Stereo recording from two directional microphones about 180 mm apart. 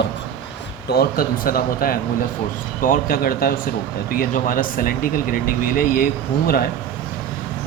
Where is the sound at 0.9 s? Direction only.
55° left (ahead or behind).